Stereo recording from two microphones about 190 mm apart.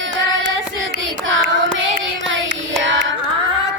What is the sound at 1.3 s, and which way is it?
Child singing, 80° right.